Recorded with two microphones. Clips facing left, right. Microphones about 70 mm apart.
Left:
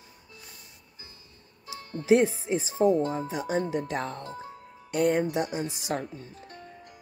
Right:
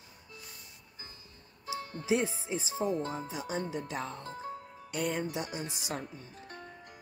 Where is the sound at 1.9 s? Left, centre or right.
Left.